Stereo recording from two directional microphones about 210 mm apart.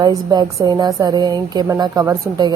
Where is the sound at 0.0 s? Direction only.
20° right (ahead or behind).